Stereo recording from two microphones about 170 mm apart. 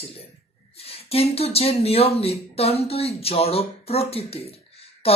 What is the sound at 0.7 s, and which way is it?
Speech, 35° left (ahead or behind).